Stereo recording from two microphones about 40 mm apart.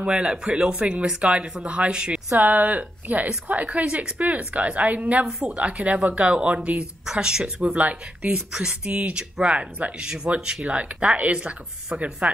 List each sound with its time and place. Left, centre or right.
0.0 s speech: right
2.4 s a woman's voice: right
7.1 s speech: centre
7.6 s a woman's voice: right
11.1 s a woman's voice: right